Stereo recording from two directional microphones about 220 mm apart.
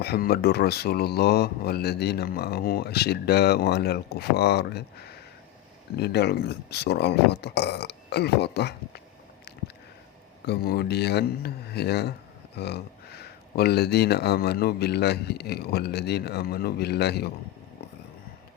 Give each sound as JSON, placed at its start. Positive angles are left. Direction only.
{"t": 0.0, "sound": "speech", "side_deg": 45}
{"t": 10.4, "sound": "speech", "side_deg": 45}